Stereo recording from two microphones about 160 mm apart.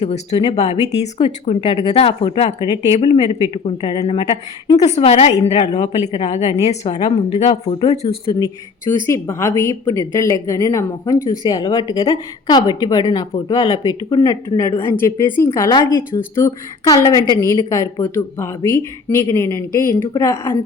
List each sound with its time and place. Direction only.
0.0 s speech: 40° left (ahead or behind)
4.9 s a woman's voice: 40° left (ahead or behind)
8.0 s speech: 30° left (ahead or behind)
9.0 s speech: 20° left (ahead or behind)